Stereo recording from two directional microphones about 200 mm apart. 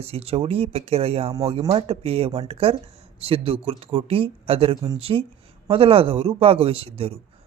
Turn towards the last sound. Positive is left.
turn(degrees=-30)  # may be behind; listen again after turning